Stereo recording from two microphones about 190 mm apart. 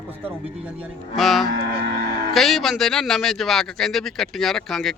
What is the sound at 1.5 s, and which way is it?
Cattle, 50° right (ahead or behind).